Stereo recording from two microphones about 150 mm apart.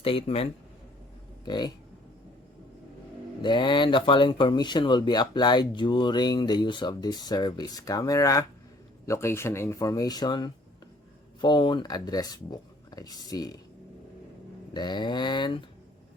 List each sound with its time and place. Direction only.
0.0 s speech: 35° left (ahead or behind)
1.5 s speech: 30° left (ahead or behind)
3.4 s speech: 30° left (ahead or behind)
14.7 s speech: 30° left (ahead or behind)